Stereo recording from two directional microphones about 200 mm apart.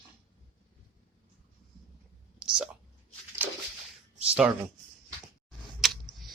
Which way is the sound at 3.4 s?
10° right (ahead or behind).